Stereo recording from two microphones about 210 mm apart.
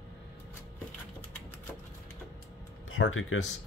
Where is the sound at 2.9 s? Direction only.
75° left (ahead or behind).